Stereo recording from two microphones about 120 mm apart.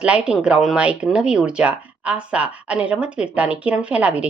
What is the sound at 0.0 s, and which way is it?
Speech, 10° right (ahead or behind).